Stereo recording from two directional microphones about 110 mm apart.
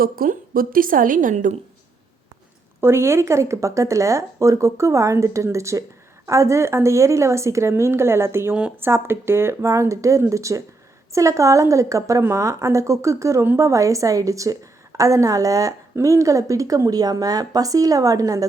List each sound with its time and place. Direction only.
2.8 s a woman's voice: 25° right (ahead or behind)
8.5 s speech: 10° right (ahead or behind)
8.9 s a woman's voice: 20° right (ahead or behind)